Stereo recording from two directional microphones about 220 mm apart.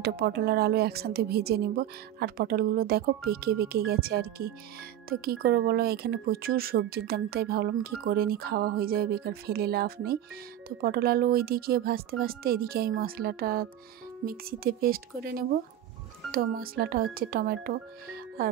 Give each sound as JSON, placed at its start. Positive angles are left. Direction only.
{"t": 0.0, "sound": "speech", "side_deg": -45}